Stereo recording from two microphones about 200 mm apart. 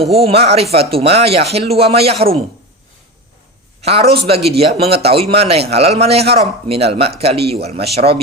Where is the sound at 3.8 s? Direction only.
30° right (ahead or behind).